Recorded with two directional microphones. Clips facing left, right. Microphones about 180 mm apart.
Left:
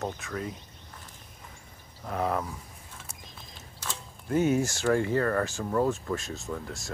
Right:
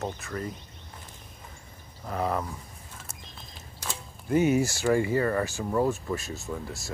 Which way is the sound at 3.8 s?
10° right (ahead or behind).